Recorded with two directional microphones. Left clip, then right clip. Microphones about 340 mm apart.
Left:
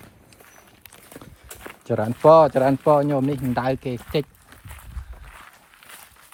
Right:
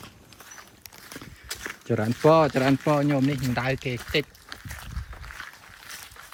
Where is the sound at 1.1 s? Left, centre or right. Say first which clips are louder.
Right 5 dB; centre.